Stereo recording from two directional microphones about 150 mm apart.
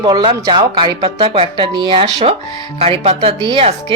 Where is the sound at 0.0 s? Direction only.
30° right (ahead or behind).